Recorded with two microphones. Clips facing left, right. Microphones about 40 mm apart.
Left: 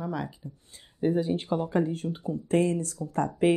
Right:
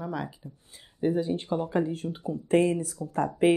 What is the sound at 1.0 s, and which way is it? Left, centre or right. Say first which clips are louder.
Speech: left 1 dB; centre.